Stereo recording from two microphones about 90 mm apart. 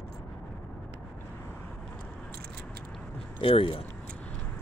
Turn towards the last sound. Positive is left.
turn(degrees=90)